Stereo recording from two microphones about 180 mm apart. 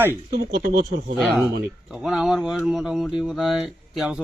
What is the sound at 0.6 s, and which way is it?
Speech, 65° right (ahead or behind).